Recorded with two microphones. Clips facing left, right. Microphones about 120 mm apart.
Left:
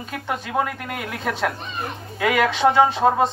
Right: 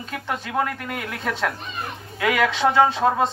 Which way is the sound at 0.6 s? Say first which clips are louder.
Even; 15° left (ahead or behind).